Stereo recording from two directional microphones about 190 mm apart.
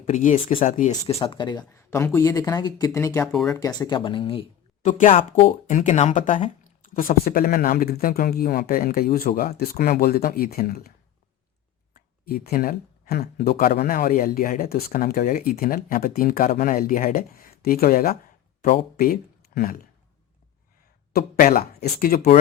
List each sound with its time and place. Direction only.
0.0 s speech: 45° left (ahead or behind); by 4.4 s 25° left (ahead or behind)
4.8 s speech: 40° left (ahead or behind)
12.2 s speech: 55° left (ahead or behind)
21.1 s speech: 50° left (ahead or behind)